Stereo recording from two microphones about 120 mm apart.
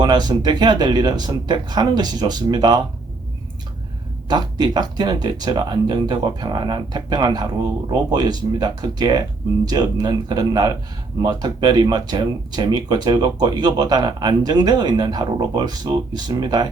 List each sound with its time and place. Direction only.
0.0 s speech: 35° right (ahead or behind)
4.3 s speech: 35° right (ahead or behind)